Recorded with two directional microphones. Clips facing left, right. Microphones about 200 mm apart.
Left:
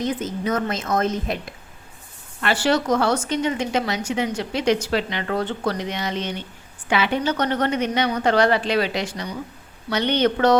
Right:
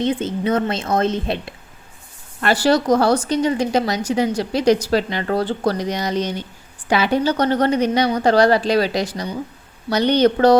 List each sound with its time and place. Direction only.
0.0 s a woman's voice: 30° right (ahead or behind)